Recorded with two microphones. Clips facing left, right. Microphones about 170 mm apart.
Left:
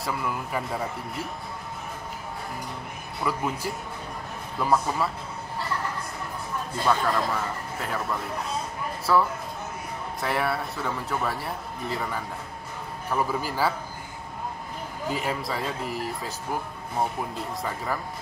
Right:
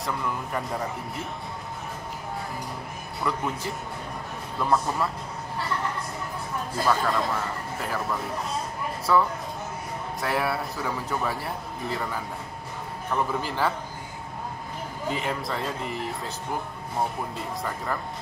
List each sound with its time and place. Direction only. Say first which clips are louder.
0.0 s speech: even; 5° left (ahead or behind)
3.2 s speech: left 1 dB; 5° left (ahead or behind)
6.8 s a man's voice: even; centre (ahead or behind)
15.0 s speech: even; 5° left (ahead or behind)